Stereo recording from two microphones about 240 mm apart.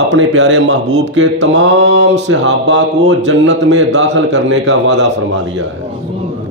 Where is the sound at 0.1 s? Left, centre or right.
Right.